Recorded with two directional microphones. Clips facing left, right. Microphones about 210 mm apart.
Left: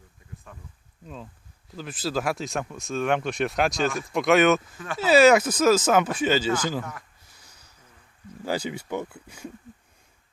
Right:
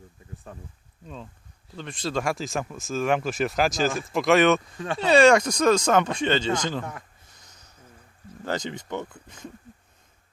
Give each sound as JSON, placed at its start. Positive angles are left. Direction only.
{"t": 0.5, "sound": "speech", "side_deg": -35}
{"t": 1.0, "sound": "speech", "side_deg": 5}
{"t": 8.4, "sound": "speech", "side_deg": 10}